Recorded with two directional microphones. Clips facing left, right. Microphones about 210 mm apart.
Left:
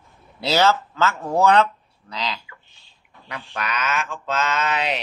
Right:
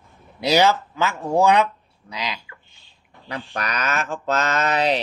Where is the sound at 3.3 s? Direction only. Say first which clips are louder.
Right 2 dB; 35° right (ahead or behind).